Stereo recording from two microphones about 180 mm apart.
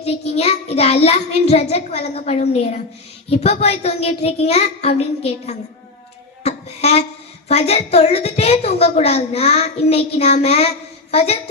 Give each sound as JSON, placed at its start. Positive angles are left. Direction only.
{"t": 0.0, "sound": "a woman's voice", "side_deg": 35}
{"t": 6.4, "sound": "a sound", "side_deg": 35}
{"t": 7.4, "sound": "a woman's voice", "side_deg": 35}